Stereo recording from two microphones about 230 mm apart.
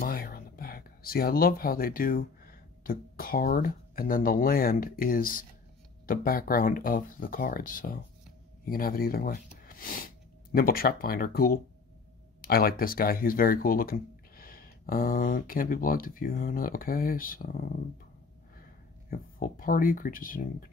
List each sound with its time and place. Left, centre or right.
0.0 s speech: left
18.6 s speech: left